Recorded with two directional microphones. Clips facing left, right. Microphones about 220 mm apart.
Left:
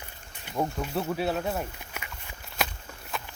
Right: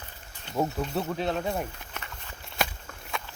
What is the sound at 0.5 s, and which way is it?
Speech, centre (ahead or behind).